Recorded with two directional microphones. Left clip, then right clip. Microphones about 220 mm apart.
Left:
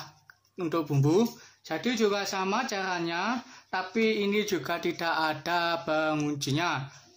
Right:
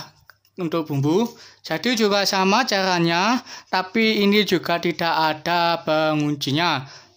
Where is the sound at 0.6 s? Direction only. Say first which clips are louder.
Right 5 dB; 30° right (ahead or behind).